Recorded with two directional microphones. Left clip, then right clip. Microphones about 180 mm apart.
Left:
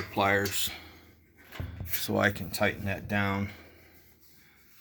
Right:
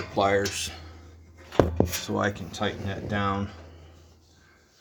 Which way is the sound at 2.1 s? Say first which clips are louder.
Left 2 dB; 35° left (ahead or behind).